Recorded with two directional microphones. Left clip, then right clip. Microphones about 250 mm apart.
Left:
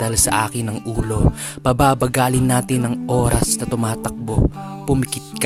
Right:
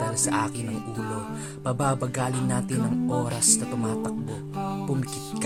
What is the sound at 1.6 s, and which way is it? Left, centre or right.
Speech, left.